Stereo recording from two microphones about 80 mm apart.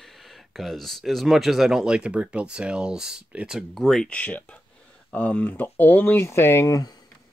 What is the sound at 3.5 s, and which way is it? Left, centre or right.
Speech, centre.